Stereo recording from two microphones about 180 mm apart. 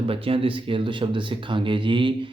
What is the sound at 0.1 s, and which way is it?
Speech, 30° right (ahead or behind).